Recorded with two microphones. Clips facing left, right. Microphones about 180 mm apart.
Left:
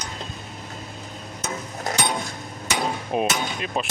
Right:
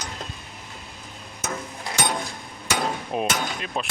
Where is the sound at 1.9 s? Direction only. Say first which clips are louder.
Left 4 dB; 45° left (ahead or behind).